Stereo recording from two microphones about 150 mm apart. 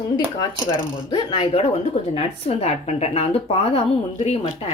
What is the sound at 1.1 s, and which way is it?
Speech, 30° left (ahead or behind).